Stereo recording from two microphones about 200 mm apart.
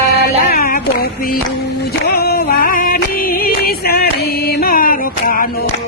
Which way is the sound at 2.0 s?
50° left (ahead or behind).